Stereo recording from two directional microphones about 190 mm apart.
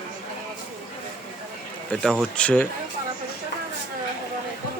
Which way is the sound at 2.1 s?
5° left (ahead or behind).